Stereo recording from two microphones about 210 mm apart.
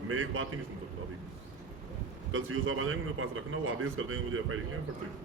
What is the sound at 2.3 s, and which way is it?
A man's voice, 75° right (ahead or behind).